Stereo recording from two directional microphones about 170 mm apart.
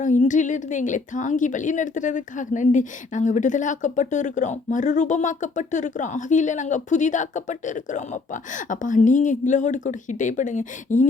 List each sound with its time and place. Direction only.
0.0 s a woman's voice: 50° left (ahead or behind)